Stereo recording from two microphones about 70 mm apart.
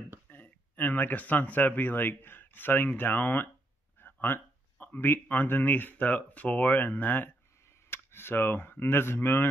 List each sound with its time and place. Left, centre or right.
0.3 s speech: left